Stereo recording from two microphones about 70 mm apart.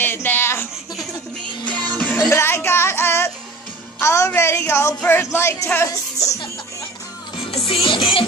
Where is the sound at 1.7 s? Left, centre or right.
Centre.